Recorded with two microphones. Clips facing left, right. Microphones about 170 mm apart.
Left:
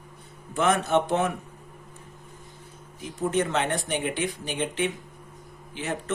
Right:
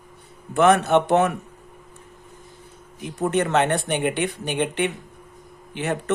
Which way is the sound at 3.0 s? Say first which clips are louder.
Right 3 dB; 65° right (ahead or behind).